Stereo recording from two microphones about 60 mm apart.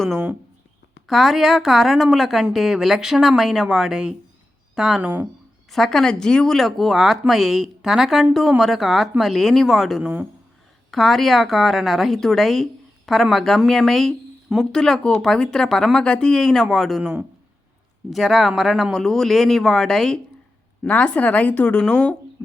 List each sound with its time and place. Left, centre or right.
1.0 s speech: centre
5.7 s speech: centre
17.0 s a man's voice: centre
18.1 s speech: centre
20.8 s a woman's voice: centre